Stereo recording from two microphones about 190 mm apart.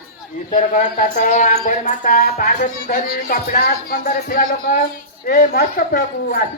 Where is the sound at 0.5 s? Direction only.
40° left (ahead or behind).